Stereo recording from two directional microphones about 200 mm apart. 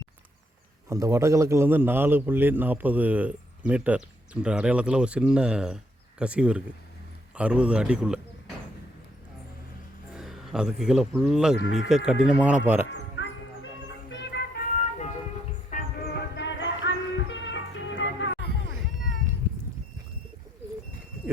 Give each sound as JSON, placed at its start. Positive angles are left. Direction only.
{"t": 0.9, "sound": "a man's voice", "side_deg": -15}
{"t": 10.2, "sound": "speech", "side_deg": -5}
{"t": 11.5, "sound": "speech", "side_deg": 70}
{"t": 11.9, "sound": "a man's voice", "side_deg": -5}
{"t": 12.9, "sound": "a sound", "side_deg": 70}
{"t": 14.1, "sound": "music", "side_deg": 60}
{"t": 15.7, "sound": "music", "side_deg": 55}